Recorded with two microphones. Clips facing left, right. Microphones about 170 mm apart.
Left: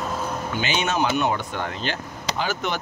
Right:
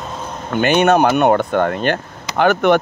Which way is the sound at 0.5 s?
55° right (ahead or behind).